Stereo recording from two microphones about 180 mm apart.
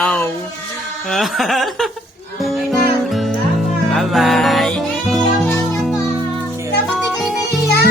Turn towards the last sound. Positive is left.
turn(degrees=65)  # may be behind; listen again after turning